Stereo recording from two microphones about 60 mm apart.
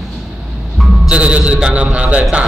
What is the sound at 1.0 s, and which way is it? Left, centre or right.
A man's voice, centre.